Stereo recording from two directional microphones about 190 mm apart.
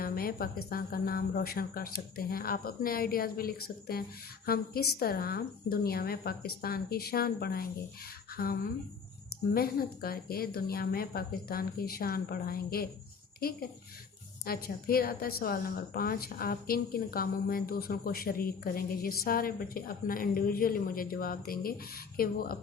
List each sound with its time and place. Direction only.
0.0 s a woman's voice: 50° left (ahead or behind)
9.6 s a woman's voice: 50° left (ahead or behind)
14.4 s a woman's voice: 50° left (ahead or behind)